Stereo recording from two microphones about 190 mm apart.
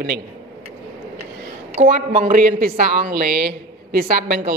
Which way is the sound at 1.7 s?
40° right (ahead or behind).